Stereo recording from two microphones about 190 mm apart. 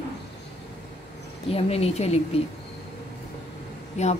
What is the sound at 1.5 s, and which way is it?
Speech, 30° left (ahead or behind).